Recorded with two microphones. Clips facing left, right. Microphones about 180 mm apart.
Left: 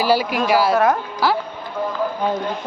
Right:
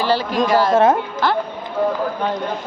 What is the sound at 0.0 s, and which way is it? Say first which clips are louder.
Speech: even; 10° left (ahead or behind).